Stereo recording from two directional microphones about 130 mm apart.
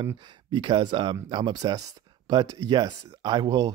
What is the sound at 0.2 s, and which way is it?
Speech, 35° right (ahead or behind).